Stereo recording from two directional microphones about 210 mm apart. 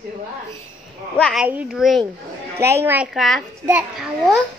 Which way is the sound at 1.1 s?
5° left (ahead or behind).